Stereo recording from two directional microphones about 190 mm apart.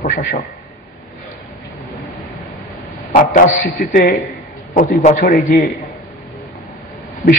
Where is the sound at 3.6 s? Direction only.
50° left (ahead or behind).